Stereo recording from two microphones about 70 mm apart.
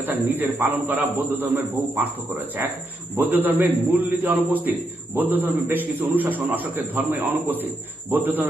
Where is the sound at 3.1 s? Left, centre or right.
Right.